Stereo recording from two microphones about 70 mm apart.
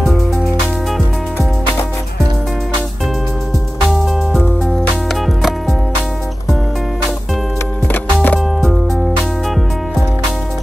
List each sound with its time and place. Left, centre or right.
3.9 s music: centre
7.9 s music: left
8.5 s music: centre